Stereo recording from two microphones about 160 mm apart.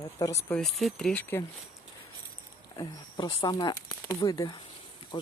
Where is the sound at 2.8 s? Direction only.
25° left (ahead or behind).